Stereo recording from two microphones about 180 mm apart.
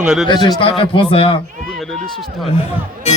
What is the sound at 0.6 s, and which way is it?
Speech, 30° left (ahead or behind).